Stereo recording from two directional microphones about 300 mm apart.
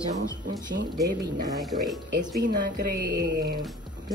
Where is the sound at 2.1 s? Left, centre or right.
Right.